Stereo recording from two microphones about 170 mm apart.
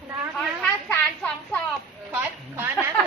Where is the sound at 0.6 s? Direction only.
10° left (ahead or behind).